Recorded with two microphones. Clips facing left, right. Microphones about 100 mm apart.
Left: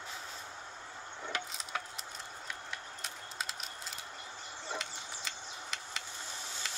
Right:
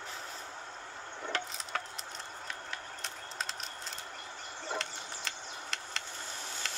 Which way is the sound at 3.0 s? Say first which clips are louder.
Right 2 dB; 5° left (ahead or behind).